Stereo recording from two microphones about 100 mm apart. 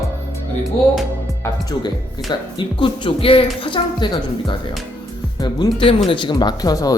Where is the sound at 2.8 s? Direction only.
55° left (ahead or behind).